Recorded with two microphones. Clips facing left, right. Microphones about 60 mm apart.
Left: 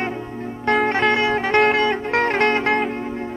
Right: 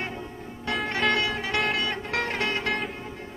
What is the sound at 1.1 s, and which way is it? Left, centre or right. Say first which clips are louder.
Music: left 8 dB; left.